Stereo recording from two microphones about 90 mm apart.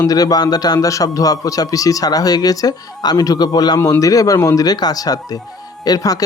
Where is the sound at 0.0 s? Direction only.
45° left (ahead or behind).